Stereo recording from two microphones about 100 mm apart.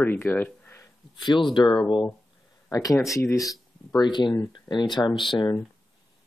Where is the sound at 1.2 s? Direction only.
50° left (ahead or behind).